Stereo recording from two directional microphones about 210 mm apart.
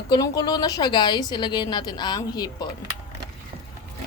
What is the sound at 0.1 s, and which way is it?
A woman's voice, 20° left (ahead or behind).